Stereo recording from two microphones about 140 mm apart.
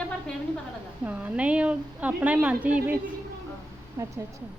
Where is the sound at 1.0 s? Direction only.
10° right (ahead or behind).